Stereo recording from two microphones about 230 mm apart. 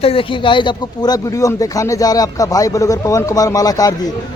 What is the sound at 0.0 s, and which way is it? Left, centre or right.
A man's voice, left.